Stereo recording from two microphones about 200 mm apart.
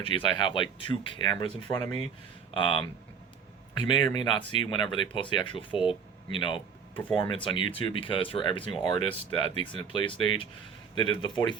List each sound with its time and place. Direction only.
0.0 s speech: 25° left (ahead or behind)
4.1 s speech: 25° left (ahead or behind)
6.9 s speech: 10° left (ahead or behind)
7.3 s speech: 25° left (ahead or behind)